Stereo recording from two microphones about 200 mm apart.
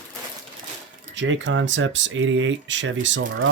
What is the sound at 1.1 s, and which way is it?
Speech, 70° right (ahead or behind).